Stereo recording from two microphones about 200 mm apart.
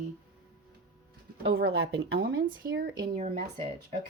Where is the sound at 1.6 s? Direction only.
55° right (ahead or behind).